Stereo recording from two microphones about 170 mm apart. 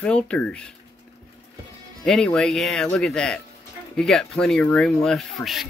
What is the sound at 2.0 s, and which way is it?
Speech, 5° left (ahead or behind).